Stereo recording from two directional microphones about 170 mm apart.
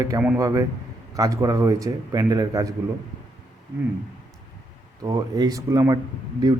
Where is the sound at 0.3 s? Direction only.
20° right (ahead or behind).